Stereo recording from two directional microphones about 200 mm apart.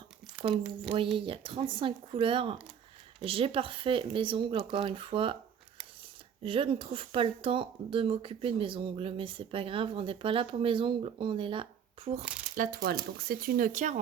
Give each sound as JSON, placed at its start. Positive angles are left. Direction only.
{"t": 1.1, "sound": "speech", "side_deg": -25}
{"t": 6.4, "sound": "speech", "side_deg": -25}
{"t": 12.5, "sound": "speech", "side_deg": -50}